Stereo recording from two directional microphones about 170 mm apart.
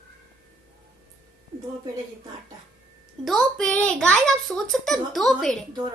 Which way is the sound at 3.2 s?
5° left (ahead or behind).